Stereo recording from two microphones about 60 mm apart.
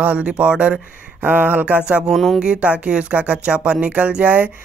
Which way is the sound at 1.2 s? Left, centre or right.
Right.